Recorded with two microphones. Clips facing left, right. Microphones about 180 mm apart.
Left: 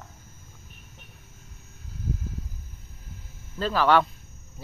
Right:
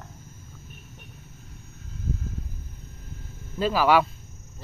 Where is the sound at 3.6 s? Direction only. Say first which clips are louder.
Right 1 dB; 10° right (ahead or behind).